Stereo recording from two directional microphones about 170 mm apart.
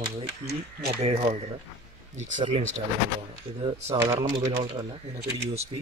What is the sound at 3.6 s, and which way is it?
A man's voice, 35° right (ahead or behind).